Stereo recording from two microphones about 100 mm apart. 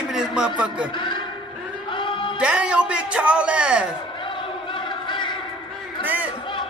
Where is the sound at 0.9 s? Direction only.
55° left (ahead or behind).